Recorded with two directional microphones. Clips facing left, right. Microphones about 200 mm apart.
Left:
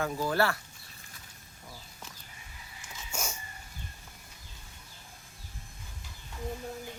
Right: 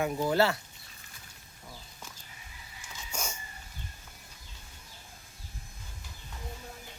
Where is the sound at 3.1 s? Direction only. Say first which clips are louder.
Left 1 dB; 10° left (ahead or behind).